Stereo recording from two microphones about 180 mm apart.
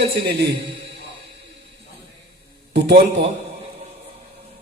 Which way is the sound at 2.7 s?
65° right (ahead or behind).